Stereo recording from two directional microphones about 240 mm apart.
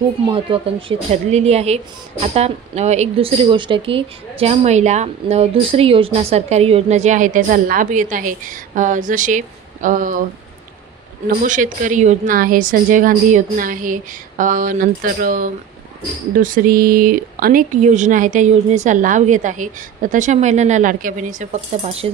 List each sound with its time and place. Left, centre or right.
0.3 s speech: right
11.4 s speech: right